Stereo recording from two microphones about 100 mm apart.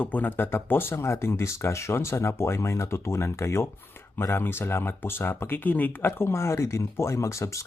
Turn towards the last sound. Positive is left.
turn(degrees=30)  # may be behind; listen again after turning